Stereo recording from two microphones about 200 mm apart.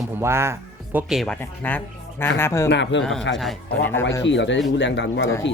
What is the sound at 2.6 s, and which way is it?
Speech, 65° left (ahead or behind).